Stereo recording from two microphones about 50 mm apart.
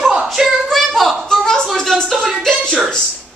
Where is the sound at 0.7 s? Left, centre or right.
Centre.